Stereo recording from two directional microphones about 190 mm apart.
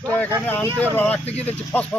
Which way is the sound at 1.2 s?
35° left (ahead or behind).